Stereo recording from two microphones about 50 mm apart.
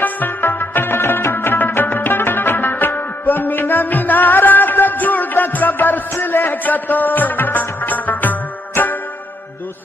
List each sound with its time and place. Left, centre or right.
0.0 s music: left